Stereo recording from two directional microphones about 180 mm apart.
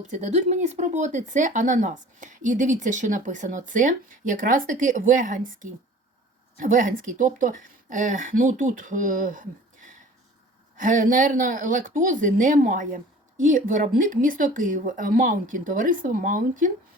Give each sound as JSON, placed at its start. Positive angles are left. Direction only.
{"t": 0.1, "sound": "speech", "side_deg": -40}